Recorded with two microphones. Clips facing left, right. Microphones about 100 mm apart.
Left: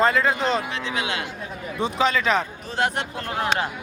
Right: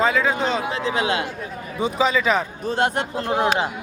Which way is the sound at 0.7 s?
35° right (ahead or behind).